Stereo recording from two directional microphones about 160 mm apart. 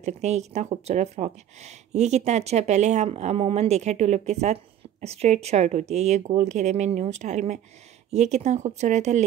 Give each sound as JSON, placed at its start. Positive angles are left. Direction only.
{"t": 0.0, "sound": "speech", "side_deg": -45}